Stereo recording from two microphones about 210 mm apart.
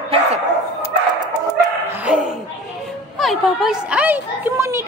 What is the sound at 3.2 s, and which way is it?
Speech, centre (ahead or behind).